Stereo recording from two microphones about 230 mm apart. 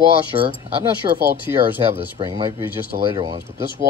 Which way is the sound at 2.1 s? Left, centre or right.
Right.